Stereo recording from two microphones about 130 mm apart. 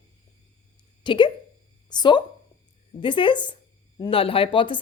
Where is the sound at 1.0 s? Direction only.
35° left (ahead or behind).